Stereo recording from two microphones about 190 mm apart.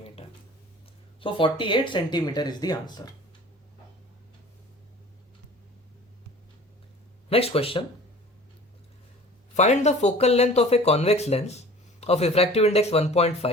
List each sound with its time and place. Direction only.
1.2 s speech: 25° left (ahead or behind)
7.3 s speech: 30° left (ahead or behind)
9.6 s speech: 35° left (ahead or behind)